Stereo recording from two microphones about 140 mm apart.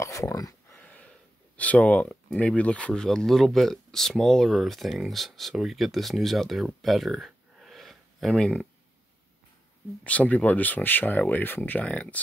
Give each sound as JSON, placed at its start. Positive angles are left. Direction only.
{"t": 0.0, "sound": "a sound", "side_deg": 20}
{"t": 1.6, "sound": "speech", "side_deg": 10}
{"t": 10.0, "sound": "speech", "side_deg": 10}